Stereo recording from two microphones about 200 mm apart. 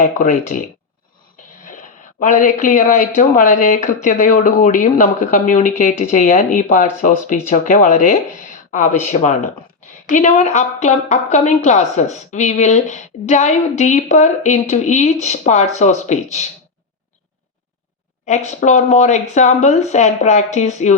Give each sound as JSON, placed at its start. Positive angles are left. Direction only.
{"t": 0.0, "sound": "speech", "side_deg": 35}
{"t": 1.6, "sound": "speech", "side_deg": 40}
{"t": 18.3, "sound": "speech", "side_deg": 35}